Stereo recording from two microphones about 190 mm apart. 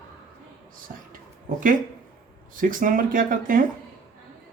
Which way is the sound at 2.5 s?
45° right (ahead or behind).